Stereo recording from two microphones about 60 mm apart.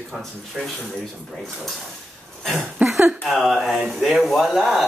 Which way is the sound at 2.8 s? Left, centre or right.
Right.